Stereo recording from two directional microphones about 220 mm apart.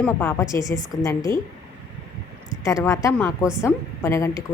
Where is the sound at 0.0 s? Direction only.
10° left (ahead or behind).